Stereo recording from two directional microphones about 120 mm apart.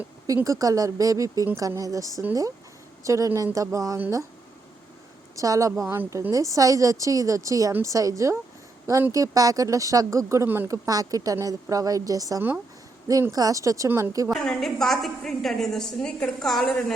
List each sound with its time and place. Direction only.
0.4 s speech: 30° right (ahead or behind)
5.4 s speech: 25° right (ahead or behind)
10.8 s speech: 30° right (ahead or behind)
14.3 s a woman's voice: centre (ahead or behind)